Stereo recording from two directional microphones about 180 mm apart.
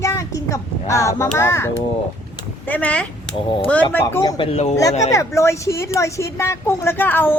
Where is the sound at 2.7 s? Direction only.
5° left (ahead or behind).